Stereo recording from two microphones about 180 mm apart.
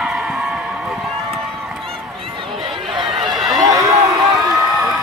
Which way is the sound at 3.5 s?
20° right (ahead or behind).